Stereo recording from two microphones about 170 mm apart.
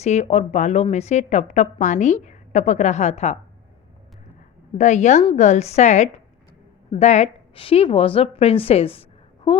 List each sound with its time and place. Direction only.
0.0 s a woman's voice: 40° left (ahead or behind)
4.8 s a woman's voice: 45° left (ahead or behind)